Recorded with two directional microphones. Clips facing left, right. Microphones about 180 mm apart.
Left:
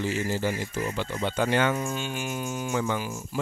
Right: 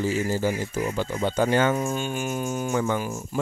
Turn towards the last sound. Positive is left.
turn(degrees=-45)  # may be behind; listen again after turning